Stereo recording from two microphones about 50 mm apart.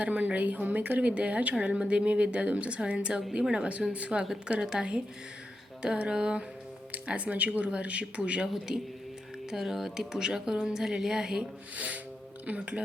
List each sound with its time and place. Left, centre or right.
0.0 s a woman's voice: right
6.9 s a woman's voice: right
9.5 s a woman's voice: centre
12.5 s a woman's voice: right